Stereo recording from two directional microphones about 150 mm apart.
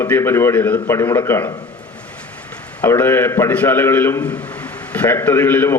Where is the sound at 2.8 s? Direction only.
15° left (ahead or behind).